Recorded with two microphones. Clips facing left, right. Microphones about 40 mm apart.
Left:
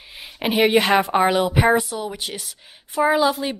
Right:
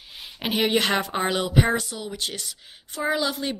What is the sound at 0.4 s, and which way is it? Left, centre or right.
A woman's voice, centre.